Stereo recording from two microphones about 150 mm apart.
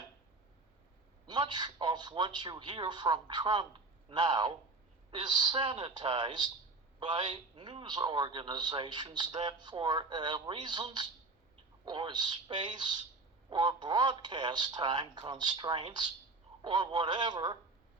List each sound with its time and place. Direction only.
1.3 s a man's voice: 30° right (ahead or behind)